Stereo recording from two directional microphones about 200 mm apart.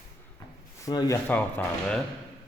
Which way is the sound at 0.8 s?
15° left (ahead or behind).